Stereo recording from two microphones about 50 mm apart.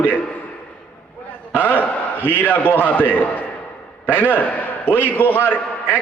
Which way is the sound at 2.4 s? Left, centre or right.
Left.